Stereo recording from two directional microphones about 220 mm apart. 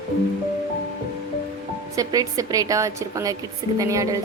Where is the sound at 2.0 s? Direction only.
15° right (ahead or behind).